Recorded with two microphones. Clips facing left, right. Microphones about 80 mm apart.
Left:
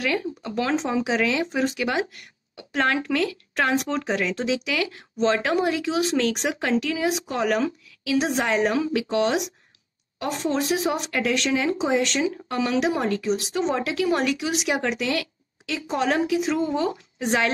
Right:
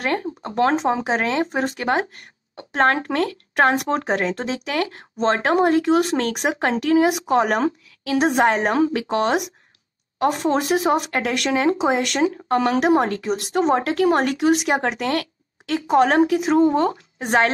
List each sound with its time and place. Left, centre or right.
0.0 s speech: right